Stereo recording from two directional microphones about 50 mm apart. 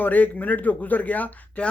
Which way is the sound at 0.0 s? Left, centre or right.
Left.